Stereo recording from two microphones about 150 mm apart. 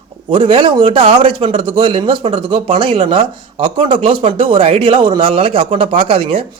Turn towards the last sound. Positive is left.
turn(degrees=-35)  # may be behind; listen again after turning